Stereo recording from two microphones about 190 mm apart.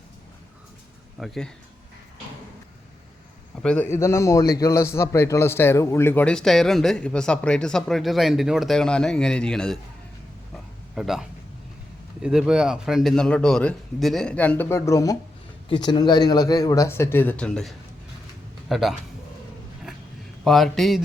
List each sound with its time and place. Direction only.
1.2 s a man's voice: centre (ahead or behind)
3.6 s a man's voice: 5° left (ahead or behind)
10.9 s a man's voice: centre (ahead or behind)
20.4 s a man's voice: centre (ahead or behind)